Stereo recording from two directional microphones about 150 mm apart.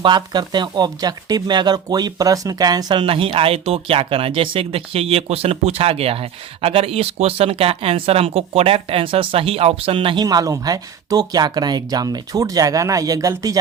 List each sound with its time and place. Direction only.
0.0 s speech: 30° right (ahead or behind)